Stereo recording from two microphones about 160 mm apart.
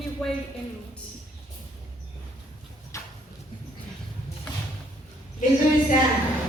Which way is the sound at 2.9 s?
20° left (ahead or behind).